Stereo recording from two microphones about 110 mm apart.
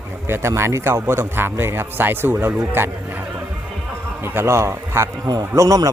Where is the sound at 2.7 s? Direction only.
20° right (ahead or behind).